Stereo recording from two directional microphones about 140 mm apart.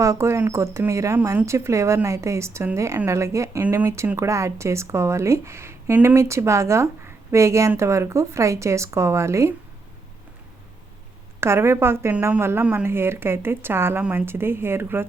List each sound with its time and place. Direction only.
0.0 s speech: 20° right (ahead or behind)
11.3 s speech: 20° right (ahead or behind)